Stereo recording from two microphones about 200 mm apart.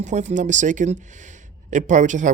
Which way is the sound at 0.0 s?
35° right (ahead or behind).